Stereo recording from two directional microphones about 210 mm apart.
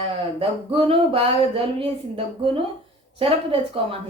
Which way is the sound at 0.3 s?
25° right (ahead or behind).